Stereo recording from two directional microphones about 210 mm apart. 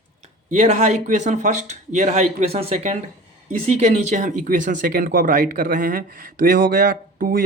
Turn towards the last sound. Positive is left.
turn(degrees=-40)  # may be behind; listen again after turning